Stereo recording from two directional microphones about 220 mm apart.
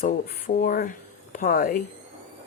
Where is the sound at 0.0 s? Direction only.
40° left (ahead or behind).